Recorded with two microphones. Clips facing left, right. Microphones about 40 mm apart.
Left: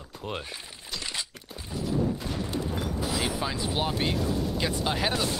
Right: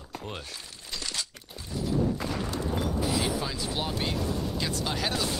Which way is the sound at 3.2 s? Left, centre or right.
Centre.